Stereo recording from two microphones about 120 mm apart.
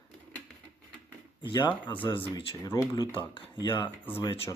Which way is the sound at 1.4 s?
40° left (ahead or behind).